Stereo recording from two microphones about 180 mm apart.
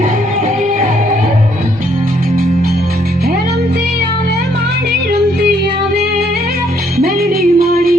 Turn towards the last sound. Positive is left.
turn(degrees=-55)  # may be behind; listen again after turning